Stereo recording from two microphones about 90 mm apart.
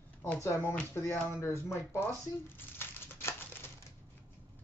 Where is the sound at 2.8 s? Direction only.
25° left (ahead or behind).